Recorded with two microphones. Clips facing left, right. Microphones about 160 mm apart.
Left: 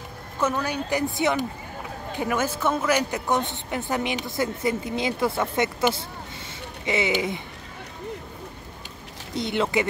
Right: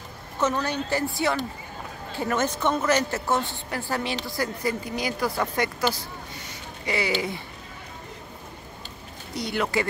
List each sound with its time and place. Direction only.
0.4 s a woman's voice: 10° left (ahead or behind)
9.3 s a woman's voice: 25° left (ahead or behind)